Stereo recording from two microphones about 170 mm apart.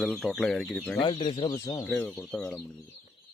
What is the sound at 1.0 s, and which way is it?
Speech, 30° left (ahead or behind).